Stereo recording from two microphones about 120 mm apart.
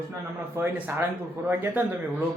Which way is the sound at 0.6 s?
20° right (ahead or behind).